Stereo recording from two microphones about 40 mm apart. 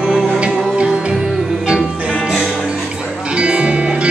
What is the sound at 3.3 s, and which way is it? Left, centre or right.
Music, right.